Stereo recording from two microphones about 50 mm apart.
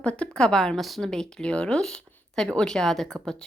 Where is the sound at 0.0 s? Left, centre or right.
Left.